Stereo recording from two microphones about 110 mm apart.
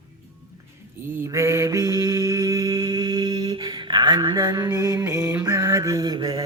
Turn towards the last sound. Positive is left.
turn(degrees=-40)  # may be behind; listen again after turning